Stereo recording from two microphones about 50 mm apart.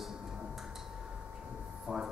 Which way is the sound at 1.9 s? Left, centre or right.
Centre.